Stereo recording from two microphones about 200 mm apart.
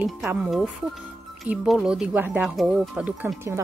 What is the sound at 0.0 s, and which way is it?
Speech, 5° right (ahead or behind).